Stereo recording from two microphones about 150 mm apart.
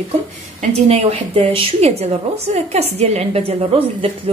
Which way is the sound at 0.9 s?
40° right (ahead or behind).